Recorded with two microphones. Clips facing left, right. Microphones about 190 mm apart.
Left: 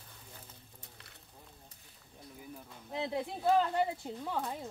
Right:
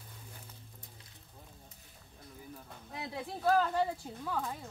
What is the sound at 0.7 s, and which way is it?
Music, 70° left (ahead or behind).